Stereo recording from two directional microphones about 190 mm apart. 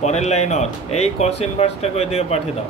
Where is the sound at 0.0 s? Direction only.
35° left (ahead or behind).